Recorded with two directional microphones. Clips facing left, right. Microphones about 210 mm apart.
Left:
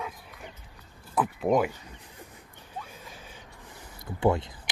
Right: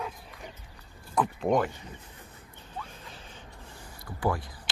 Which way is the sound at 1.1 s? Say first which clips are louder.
Left 1 dB; 5° left (ahead or behind).